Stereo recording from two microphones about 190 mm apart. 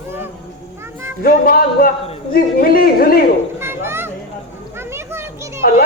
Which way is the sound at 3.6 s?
10° right (ahead or behind).